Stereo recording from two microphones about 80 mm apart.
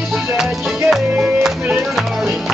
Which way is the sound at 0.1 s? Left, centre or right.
Centre.